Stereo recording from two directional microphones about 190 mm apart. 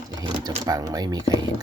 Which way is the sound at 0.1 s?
20° right (ahead or behind).